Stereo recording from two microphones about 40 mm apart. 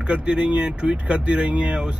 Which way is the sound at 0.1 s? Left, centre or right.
Right.